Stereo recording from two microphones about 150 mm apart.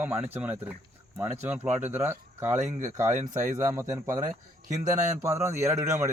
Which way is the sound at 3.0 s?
60° right (ahead or behind).